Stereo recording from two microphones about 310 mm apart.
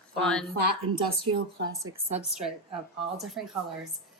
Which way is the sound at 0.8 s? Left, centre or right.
Right.